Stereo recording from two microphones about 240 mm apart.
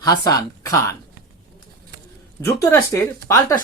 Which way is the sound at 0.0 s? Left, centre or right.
Centre.